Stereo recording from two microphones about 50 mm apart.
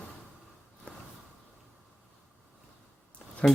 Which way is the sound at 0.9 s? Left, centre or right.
Left.